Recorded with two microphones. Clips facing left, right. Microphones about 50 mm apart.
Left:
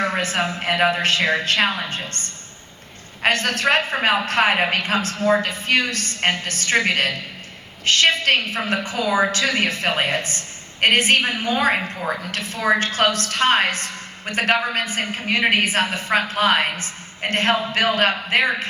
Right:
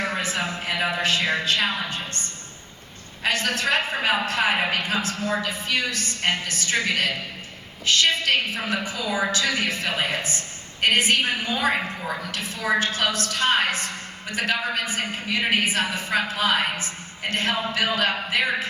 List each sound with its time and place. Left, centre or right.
0.0 s a sound: left
0.6 s a woman's voice: left
3.2 s a woman's voice: left